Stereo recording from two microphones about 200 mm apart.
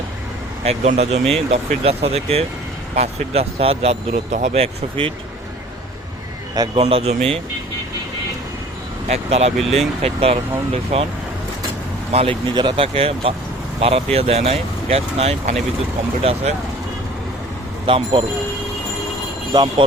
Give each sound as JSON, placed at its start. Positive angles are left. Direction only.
{"t": 0.6, "sound": "speech", "side_deg": -30}
{"t": 6.7, "sound": "speech", "side_deg": -30}
{"t": 9.0, "sound": "speech", "side_deg": -30}
{"t": 12.1, "sound": "speech", "side_deg": -30}
{"t": 17.8, "sound": "speech", "side_deg": -25}